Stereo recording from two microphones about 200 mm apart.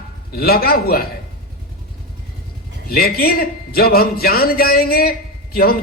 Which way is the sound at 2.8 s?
50° left (ahead or behind).